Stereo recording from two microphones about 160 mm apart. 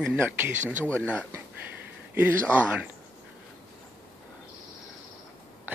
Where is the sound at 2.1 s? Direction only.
10° right (ahead or behind).